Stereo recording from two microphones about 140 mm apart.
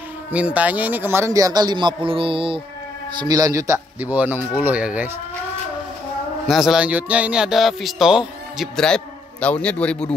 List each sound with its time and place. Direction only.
0.3 s a man's voice: 10° right (ahead or behind); by 2.6 s 40° right (ahead or behind)
3.2 s speech: 25° right (ahead or behind); by 5.1 s 10° right (ahead or behind)
6.4 s speech: centre (ahead or behind)